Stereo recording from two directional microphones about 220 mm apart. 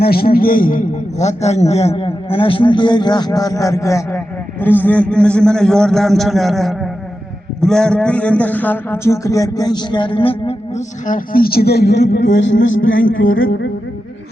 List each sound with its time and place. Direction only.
0.0 s a man's voice: 45° left (ahead or behind); by 13.4 s 65° left (ahead or behind)